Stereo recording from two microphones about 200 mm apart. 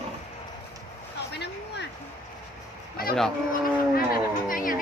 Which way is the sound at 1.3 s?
55° left (ahead or behind).